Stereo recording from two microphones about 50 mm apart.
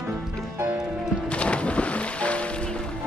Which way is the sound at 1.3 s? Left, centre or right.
Left.